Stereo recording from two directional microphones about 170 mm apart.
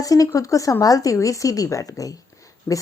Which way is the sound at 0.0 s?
20° left (ahead or behind).